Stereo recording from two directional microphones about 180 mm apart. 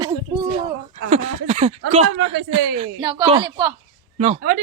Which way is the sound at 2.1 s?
90° right.